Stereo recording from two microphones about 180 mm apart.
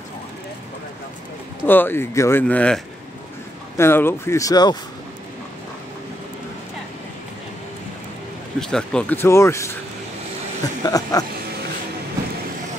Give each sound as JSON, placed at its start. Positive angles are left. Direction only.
{"t": 1.7, "sound": "speech", "side_deg": 10}
{"t": 8.5, "sound": "speech", "side_deg": 5}
{"t": 10.8, "sound": "speech", "side_deg": 20}